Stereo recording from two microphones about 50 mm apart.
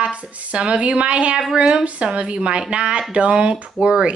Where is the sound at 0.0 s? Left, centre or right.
Right.